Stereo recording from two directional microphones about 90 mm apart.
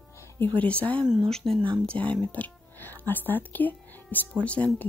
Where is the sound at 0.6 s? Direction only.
15° left (ahead or behind).